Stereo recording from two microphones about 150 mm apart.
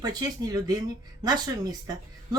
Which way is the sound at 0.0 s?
25° right (ahead or behind).